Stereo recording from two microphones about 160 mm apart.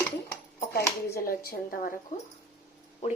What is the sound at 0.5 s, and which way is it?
Speech, 80° left.